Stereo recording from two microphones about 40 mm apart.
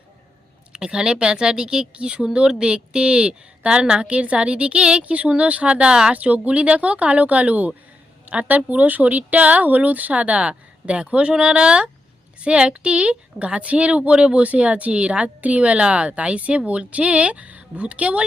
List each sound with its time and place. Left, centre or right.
0.7 s speech: centre
6.1 s a woman's voice: right
10.1 s a woman's voice: right